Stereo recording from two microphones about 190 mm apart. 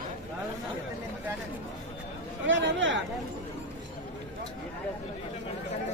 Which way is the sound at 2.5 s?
75° right (ahead or behind).